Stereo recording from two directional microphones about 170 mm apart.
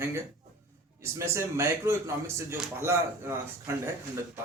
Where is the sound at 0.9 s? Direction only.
15° right (ahead or behind).